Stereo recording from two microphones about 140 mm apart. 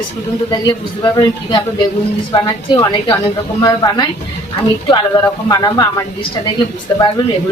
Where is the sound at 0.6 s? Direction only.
30° left (ahead or behind).